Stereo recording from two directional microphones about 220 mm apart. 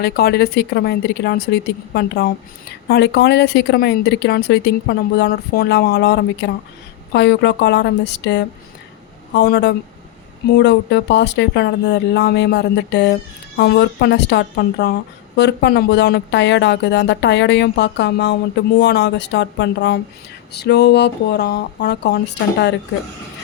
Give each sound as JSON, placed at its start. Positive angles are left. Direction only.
{"t": 0.0, "sound": "speech", "side_deg": 45}